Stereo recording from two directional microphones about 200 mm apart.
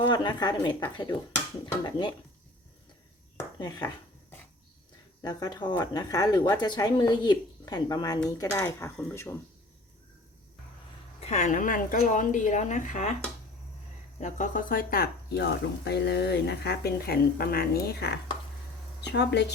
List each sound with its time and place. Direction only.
0.1 s speech: 20° left (ahead or behind)
3.3 s dishes: 20° left (ahead or behind)
5.2 s speech: 20° left (ahead or behind)
11.2 s speech: 35° left (ahead or behind)
14.2 s speech: 35° left (ahead or behind); by 19.5 s 55° left (ahead or behind)